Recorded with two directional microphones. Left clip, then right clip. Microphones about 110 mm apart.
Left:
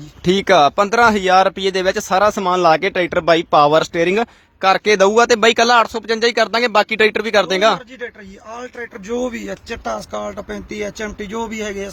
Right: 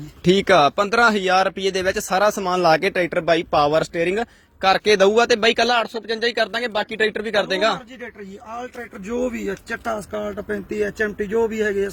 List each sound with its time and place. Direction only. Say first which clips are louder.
0.3 s speech: left 3 dB; 15° left (ahead or behind); by 4.3 s 35° left (ahead or behind)
4.6 s speech: left 3 dB; 20° left (ahead or behind); by 7.8 s 45° left (ahead or behind)
9.0 s speech: left 1 dB; 15° left (ahead or behind)